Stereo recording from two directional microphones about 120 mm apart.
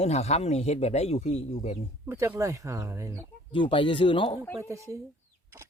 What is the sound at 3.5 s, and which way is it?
Speech, 45° left (ahead or behind).